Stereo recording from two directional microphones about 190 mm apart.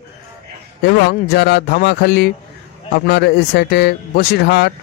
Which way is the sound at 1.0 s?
60° left (ahead or behind).